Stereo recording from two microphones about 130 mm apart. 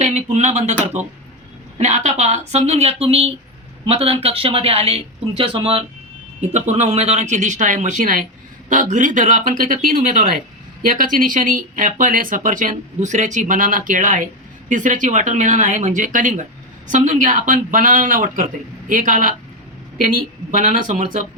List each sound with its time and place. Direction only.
0.0 s speech: 65° right (ahead or behind); by 5.8 s 45° right (ahead or behind)
6.4 s speech: 60° right (ahead or behind); by 14.3 s 90° right
14.7 s speech: 75° right (ahead or behind)